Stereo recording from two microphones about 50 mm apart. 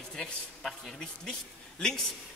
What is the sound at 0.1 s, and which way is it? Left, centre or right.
Speech, centre.